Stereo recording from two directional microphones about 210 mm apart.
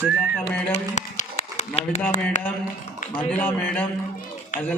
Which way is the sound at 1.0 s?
35° left (ahead or behind).